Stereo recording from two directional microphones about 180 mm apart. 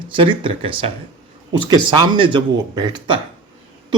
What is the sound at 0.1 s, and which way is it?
Speech, 25° right (ahead or behind).